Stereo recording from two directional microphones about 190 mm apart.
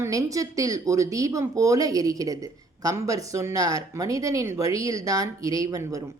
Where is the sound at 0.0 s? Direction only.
15° right (ahead or behind).